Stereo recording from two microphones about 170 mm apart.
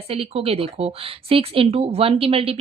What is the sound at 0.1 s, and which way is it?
Speech, 35° right (ahead or behind).